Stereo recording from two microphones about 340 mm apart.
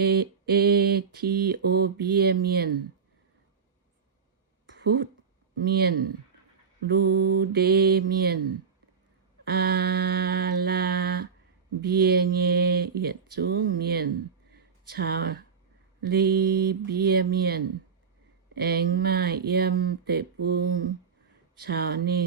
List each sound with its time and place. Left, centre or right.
0.0 s mantra: right
4.8 s speech: right
5.6 s mantra: right
9.4 s mantra: right
14.5 s a sound: right
16.0 s mantra: right